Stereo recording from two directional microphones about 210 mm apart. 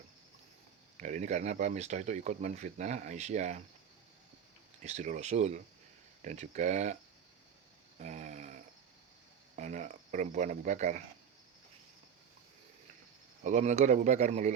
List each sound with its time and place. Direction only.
0.9 s speech: 35° right (ahead or behind)
4.8 s speech: 35° right (ahead or behind)
7.9 s a sound: 35° right (ahead or behind)
9.6 s speech: 35° right (ahead or behind)
13.4 s speech: 35° right (ahead or behind)